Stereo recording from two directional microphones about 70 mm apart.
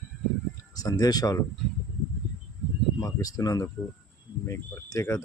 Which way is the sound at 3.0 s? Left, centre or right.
Left.